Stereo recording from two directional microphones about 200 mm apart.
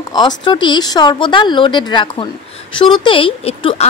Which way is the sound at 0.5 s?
25° left (ahead or behind).